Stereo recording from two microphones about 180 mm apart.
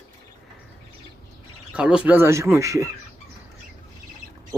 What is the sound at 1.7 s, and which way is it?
Speech, 5° right (ahead or behind).